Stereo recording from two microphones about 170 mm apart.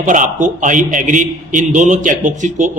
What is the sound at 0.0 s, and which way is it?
Speech, 50° right (ahead or behind).